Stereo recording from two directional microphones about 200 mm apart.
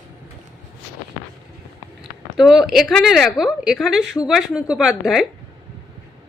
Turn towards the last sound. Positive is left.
turn(degrees=0)  # may be behind; listen again after turning